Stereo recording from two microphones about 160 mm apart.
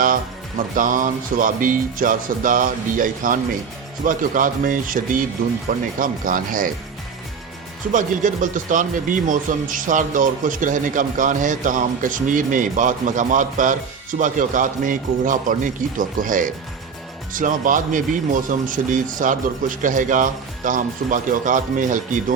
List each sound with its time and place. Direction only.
0.8 s speech: 55° right (ahead or behind)
7.9 s speech: 55° right (ahead or behind)